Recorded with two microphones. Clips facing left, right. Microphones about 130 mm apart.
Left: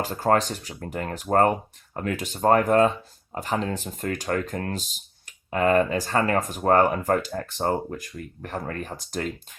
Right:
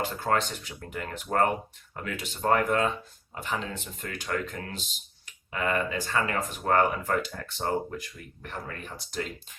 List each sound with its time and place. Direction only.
0.0 s speech: 40° left (ahead or behind)